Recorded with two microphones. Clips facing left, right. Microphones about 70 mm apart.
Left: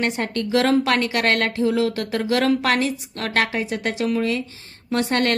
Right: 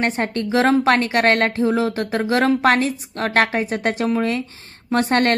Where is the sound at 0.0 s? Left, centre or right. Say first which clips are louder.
Right 2 dB; right.